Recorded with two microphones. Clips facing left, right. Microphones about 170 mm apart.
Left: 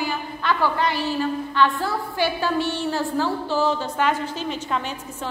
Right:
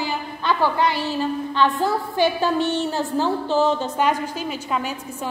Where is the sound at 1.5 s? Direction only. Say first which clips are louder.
Right 3 dB; 20° right (ahead or behind).